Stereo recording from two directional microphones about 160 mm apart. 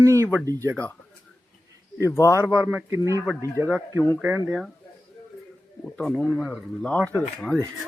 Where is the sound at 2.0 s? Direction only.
20° left (ahead or behind).